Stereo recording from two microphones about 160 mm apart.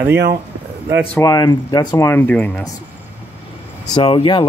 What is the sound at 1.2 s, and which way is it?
Speech, 25° left (ahead or behind).